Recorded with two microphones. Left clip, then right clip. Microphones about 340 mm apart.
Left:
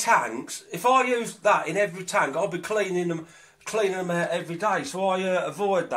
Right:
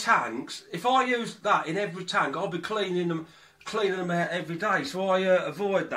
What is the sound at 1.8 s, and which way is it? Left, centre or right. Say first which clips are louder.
Speech: left 4 dB; centre.